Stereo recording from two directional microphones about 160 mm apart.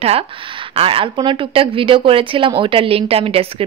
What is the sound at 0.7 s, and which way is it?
Speech, 35° right (ahead or behind).